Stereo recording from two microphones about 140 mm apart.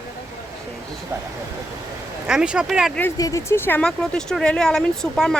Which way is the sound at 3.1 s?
25° left (ahead or behind).